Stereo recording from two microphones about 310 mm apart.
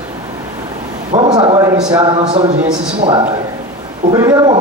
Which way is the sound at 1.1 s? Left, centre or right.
Centre.